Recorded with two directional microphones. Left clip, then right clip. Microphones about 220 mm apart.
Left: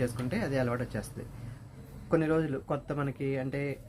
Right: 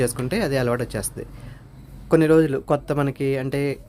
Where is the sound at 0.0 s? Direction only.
50° right (ahead or behind).